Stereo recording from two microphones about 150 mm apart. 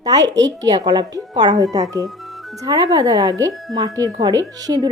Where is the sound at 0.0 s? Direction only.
25° right (ahead or behind).